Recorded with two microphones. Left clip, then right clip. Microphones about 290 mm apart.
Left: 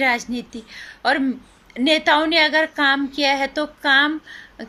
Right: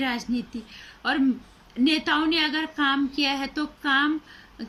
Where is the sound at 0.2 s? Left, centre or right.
Left.